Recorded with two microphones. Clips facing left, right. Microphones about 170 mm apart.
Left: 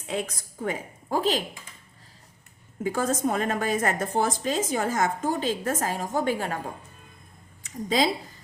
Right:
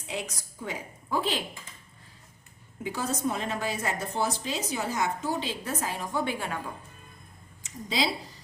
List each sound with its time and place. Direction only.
0.1 s a woman's voice: 55° left (ahead or behind)
2.8 s a woman's voice: 50° left (ahead or behind)
7.6 s speech: 50° left (ahead or behind)